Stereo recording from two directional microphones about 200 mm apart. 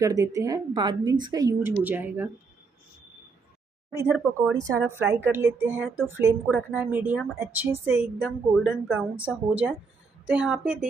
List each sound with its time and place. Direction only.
0.0 s a woman's voice: 15° right (ahead or behind)
4.0 s a woman's voice: 10° right (ahead or behind)